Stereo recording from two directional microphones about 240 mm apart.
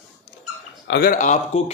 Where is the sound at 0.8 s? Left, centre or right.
Left.